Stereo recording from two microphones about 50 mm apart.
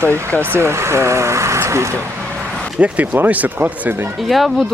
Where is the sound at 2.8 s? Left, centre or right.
Right.